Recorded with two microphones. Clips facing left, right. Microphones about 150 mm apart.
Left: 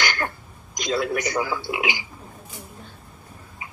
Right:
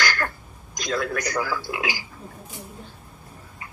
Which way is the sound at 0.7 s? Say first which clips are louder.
Left 2 dB; 20° left (ahead or behind).